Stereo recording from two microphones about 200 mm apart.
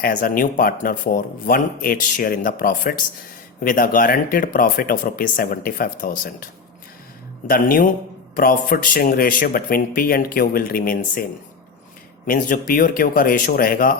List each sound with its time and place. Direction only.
0.0 s speech: 40° left (ahead or behind)
12.2 s speech: 45° left (ahead or behind)